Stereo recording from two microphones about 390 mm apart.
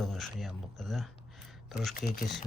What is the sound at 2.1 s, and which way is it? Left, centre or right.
Speech, centre.